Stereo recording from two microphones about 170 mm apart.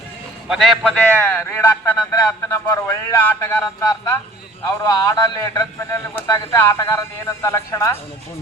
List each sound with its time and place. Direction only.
0.4 s a man's voice: centre (ahead or behind); by 7.9 s 20° left (ahead or behind)